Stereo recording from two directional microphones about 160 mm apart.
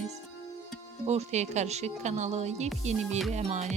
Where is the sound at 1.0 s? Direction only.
45° right (ahead or behind).